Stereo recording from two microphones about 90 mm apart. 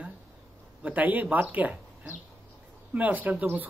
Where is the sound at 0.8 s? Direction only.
15° right (ahead or behind).